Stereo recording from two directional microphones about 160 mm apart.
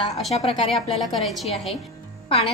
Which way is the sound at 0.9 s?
Centre (ahead or behind).